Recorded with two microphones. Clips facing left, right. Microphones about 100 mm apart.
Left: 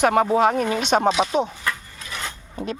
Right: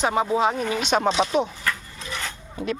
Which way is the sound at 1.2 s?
20° left (ahead or behind).